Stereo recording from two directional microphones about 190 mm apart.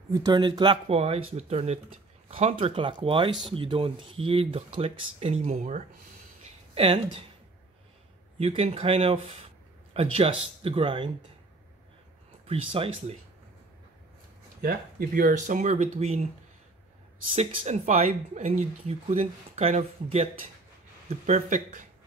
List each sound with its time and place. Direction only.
0.1 s speech: 20° right (ahead or behind); by 5.9 s 40° right (ahead or behind)
6.4 s a sound: 30° right (ahead or behind)
8.4 s speech: 30° right (ahead or behind)
12.4 s speech: 30° right (ahead or behind)
14.6 s speech: 50° right (ahead or behind); by 16.3 s 35° right (ahead or behind)
17.3 s speech: 30° right (ahead or behind)